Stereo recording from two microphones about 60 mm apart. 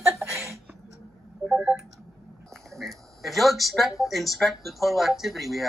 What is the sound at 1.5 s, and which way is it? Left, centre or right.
Telephone dialing, centre.